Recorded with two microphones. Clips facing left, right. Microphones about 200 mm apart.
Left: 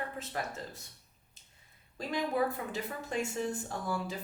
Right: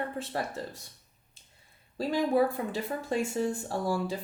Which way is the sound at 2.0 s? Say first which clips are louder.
Right 6 dB; 30° right (ahead or behind).